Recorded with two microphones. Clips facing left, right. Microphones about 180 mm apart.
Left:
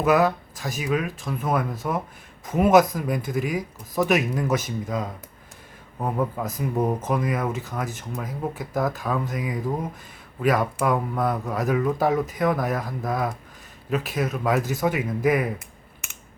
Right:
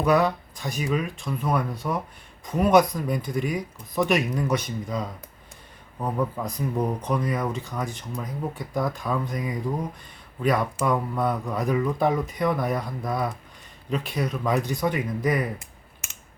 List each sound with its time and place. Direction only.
0.0 s speech: 5° left (ahead or behind)
6.0 s a man's voice: 25° left (ahead or behind)
7.0 s speech: 5° left (ahead or behind)